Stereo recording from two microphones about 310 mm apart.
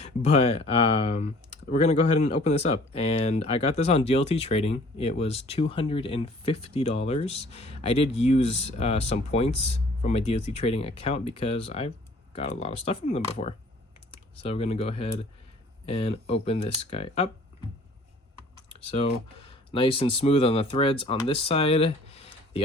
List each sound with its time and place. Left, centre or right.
0.0 s speech: left
18.7 s speech: centre